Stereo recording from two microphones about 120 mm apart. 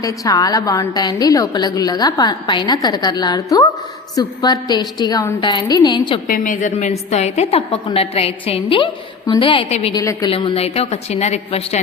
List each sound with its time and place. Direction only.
0.0 s a woman's voice: 30° left (ahead or behind)
6.2 s a woman's voice: 90° left
7.1 s a woman's voice: 65° left (ahead or behind); by 9.6 s 45° left (ahead or behind)
9.6 s a woman's voice: 65° left (ahead or behind)
9.9 s a woman's voice: 30° left (ahead or behind)
10.2 s a woman's voice: 50° left (ahead or behind); by 11.8 s 65° left (ahead or behind)